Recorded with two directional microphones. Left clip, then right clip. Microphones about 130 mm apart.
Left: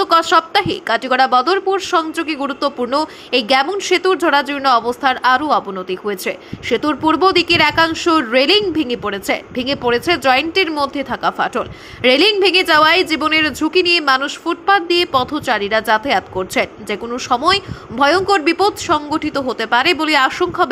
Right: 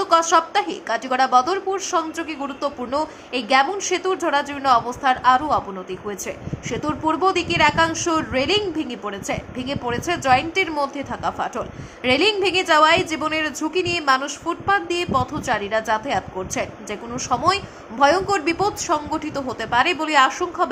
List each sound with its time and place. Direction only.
0.0 s a woman's voice: 25° left (ahead or behind)
3.3 s a woman's voice: 35° left (ahead or behind)
10.8 s a woman's voice: 20° left (ahead or behind)
19.7 s a woman's voice: 30° left (ahead or behind)